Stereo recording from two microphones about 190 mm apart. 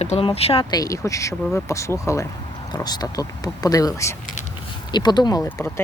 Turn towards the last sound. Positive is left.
turn(degrees=10)  # may be behind; listen again after turning